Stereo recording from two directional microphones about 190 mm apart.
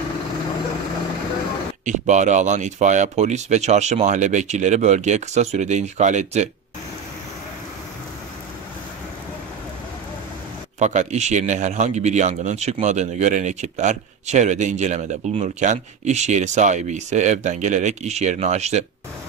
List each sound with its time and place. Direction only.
1.9 s speech: 40° right (ahead or behind)
10.8 s speech: 40° right (ahead or behind)